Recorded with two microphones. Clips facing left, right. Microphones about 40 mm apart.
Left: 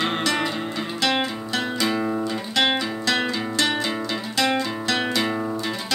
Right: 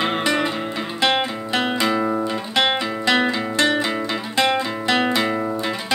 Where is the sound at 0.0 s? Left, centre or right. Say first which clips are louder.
Right 3 dB; centre.